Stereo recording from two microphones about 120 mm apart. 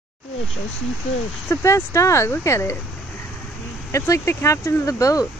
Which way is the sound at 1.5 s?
25° left (ahead or behind).